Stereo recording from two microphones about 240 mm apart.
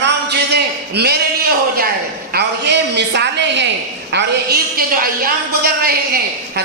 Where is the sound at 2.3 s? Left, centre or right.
Right.